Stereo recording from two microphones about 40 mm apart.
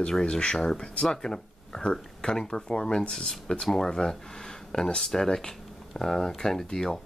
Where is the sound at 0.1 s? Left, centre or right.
Left.